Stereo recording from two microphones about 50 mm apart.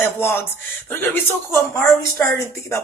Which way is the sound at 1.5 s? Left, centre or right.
Left.